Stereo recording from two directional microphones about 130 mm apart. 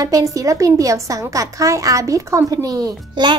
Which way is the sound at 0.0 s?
25° right (ahead or behind).